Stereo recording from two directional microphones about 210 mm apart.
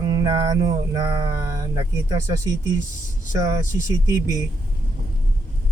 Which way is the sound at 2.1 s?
20° right (ahead or behind).